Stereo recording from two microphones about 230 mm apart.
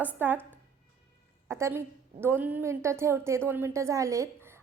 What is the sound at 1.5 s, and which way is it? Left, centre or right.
A woman's voice, centre.